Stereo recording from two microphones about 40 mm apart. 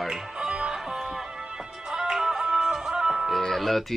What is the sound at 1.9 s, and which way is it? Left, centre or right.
Music, centre.